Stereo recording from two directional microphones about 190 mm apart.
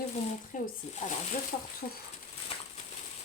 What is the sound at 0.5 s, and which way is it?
Speech, 45° left (ahead or behind).